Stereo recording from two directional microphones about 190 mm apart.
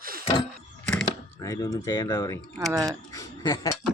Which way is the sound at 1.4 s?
20° left (ahead or behind).